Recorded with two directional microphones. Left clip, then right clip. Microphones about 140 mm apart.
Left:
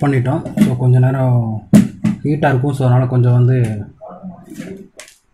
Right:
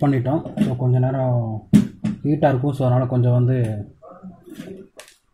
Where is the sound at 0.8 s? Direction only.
50° right (ahead or behind).